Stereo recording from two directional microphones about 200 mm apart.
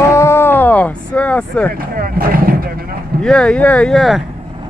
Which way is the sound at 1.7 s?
45° right (ahead or behind).